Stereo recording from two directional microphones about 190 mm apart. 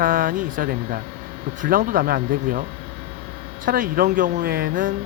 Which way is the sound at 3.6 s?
45° right (ahead or behind).